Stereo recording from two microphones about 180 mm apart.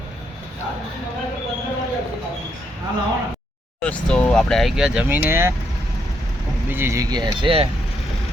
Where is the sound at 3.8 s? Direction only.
5° left (ahead or behind); by 5.5 s 15° right (ahead or behind).